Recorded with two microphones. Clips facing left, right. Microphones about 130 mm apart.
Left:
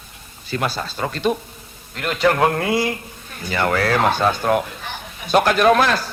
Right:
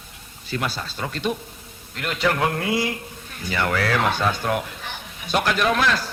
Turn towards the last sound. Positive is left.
turn(degrees=45)  # may be behind; listen again after turning